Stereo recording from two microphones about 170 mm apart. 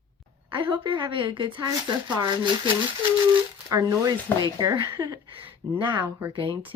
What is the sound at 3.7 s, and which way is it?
Speech, 20° right (ahead or behind).